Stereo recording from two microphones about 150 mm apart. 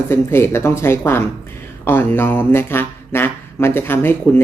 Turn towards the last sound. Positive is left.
turn(degrees=15)  # may be behind; listen again after turning